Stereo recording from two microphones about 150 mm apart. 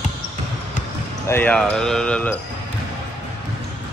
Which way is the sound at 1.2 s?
10° left (ahead or behind).